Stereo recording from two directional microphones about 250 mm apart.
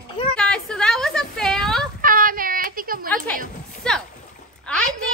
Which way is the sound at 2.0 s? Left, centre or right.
Right.